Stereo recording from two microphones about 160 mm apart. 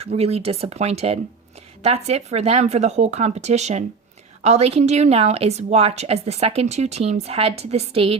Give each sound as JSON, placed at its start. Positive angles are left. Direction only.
{"t": 0.0, "sound": "a woman's voice", "side_deg": -40}